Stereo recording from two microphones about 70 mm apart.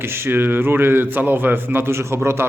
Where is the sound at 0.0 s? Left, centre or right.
Right.